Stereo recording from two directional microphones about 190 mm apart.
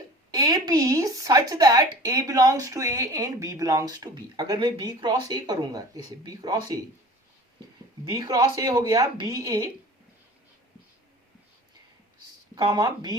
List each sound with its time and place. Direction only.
0.3 s speech: 20° right (ahead or behind)
8.1 s speech: 20° right (ahead or behind)
12.5 s speech: 20° right (ahead or behind)